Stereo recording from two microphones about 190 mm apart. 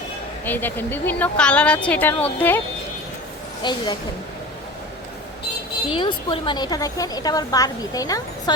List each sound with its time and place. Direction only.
0.4 s a woman's voice: 10° left (ahead or behind)
3.6 s a woman's voice: 25° left (ahead or behind)
5.9 s a woman's voice: 25° left (ahead or behind)